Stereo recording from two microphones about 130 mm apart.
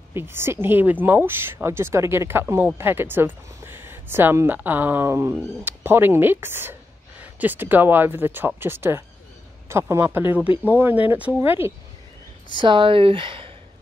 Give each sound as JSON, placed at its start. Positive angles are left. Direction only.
{"t": 0.1, "sound": "speech", "side_deg": -20}
{"t": 12.5, "sound": "speech", "side_deg": -40}